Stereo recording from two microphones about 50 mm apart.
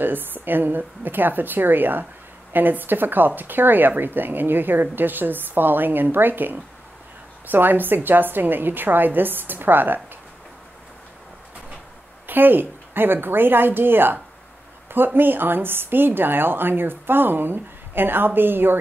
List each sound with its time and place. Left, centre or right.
0.0 s speech: right
12.3 s a woman's voice: right